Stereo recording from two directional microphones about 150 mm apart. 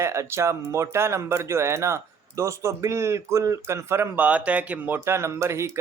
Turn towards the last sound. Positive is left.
turn(degrees=-20)  # may be behind; listen again after turning